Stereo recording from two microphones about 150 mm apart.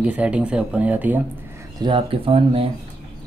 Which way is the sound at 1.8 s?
35° right (ahead or behind).